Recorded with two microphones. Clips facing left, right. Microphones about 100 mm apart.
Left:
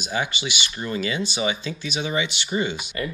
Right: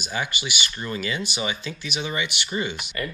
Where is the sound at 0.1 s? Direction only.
25° left (ahead or behind).